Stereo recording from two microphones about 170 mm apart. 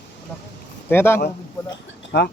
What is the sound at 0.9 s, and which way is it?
Speech, 15° left (ahead or behind).